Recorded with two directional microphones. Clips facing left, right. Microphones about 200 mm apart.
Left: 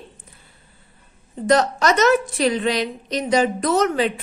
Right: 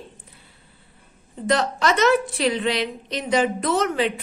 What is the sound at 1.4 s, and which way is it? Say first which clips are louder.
A woman's voice: left 4 dB; 45° left (ahead or behind).